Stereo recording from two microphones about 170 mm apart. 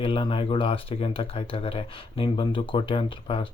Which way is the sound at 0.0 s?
30° left (ahead or behind).